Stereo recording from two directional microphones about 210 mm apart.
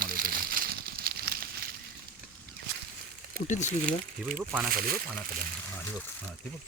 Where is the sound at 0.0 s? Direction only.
40° right (ahead or behind).